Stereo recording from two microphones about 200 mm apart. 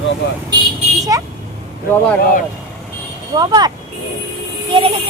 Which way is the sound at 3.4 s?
20° right (ahead or behind).